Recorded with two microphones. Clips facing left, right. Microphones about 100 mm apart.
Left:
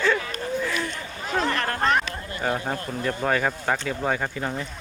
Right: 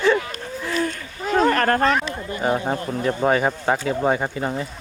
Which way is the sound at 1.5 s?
50° right (ahead or behind).